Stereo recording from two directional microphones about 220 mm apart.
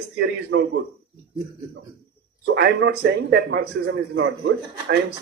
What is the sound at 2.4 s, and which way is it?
Speech, 50° right (ahead or behind).